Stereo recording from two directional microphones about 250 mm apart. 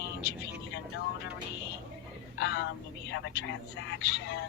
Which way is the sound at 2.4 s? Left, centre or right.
Left.